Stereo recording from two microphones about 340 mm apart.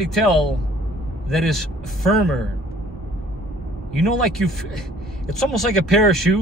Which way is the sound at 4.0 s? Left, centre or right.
Centre.